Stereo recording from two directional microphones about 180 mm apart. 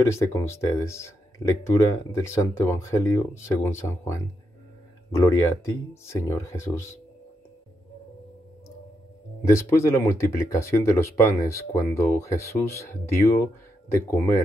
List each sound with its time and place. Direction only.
0.0 s speech: 15° left (ahead or behind)
9.4 s speech: 15° left (ahead or behind)